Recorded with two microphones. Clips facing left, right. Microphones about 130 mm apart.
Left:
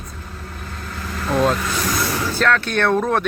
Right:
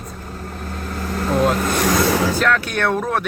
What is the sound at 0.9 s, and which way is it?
Vehicle, 40° right (ahead or behind).